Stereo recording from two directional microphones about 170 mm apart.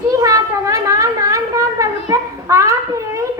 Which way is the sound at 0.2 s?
20° right (ahead or behind).